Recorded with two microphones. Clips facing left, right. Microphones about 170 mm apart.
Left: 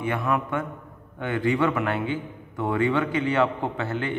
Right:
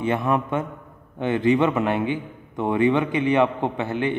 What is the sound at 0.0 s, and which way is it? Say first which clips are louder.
A man's voice: right 3 dB; 25° right (ahead or behind).